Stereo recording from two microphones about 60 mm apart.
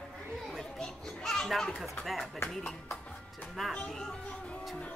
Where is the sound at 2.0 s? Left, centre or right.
Centre.